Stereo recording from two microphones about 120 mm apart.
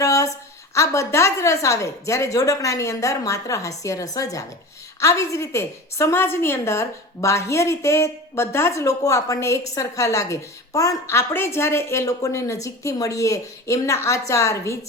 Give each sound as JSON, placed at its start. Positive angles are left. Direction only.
{"t": 0.0, "sound": "a woman's voice", "side_deg": 25}